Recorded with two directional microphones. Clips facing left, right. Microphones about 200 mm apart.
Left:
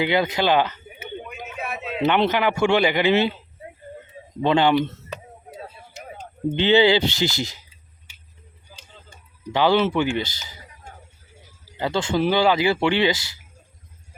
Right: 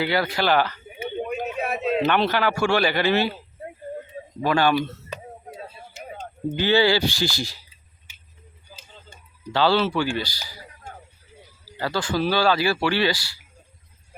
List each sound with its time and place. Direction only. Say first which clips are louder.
0.0 s speech: left 2 dB; 20° left (ahead or behind)
1.2 s a sound: right 11 dB; 40° right (ahead or behind)
2.0 s speech: left 6 dB; 20° left (ahead or behind)
4.4 s speech: left 2 dB; 20° left (ahead or behind)
6.5 s speech: left 3 dB; 20° left (ahead or behind)
9.5 s speech: left 2 dB; 15° left (ahead or behind)
11.8 s speech: left 2 dB; 25° left (ahead or behind)